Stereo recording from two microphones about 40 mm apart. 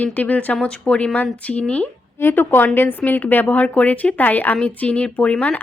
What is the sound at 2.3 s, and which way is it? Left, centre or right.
A woman's voice, left.